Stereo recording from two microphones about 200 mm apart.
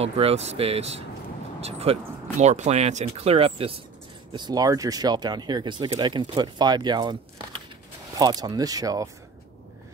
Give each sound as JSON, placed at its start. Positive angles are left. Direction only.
{"t": 0.0, "sound": "speech", "side_deg": -30}